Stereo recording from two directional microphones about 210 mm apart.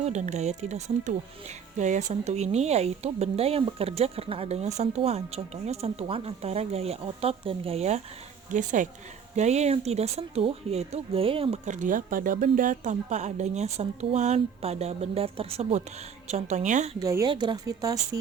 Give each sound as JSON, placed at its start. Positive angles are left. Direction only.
{"t": 0.0, "sound": "speech", "side_deg": -35}
{"t": 17.0, "sound": "speech", "side_deg": -15}